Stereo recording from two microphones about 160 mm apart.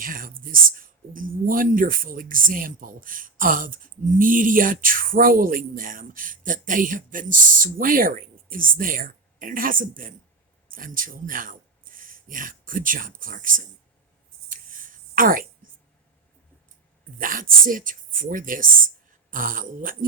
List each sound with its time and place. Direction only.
0.0 s speech: 60° right (ahead or behind)
14.5 s a sound: 60° right (ahead or behind)
17.2 s speech: 60° right (ahead or behind)